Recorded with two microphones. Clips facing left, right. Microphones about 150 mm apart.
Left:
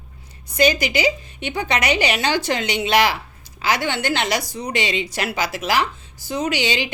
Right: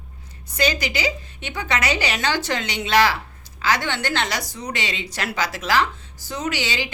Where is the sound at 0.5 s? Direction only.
15° left (ahead or behind).